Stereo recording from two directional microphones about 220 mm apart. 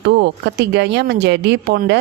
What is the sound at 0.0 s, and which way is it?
Speech, 50° right (ahead or behind).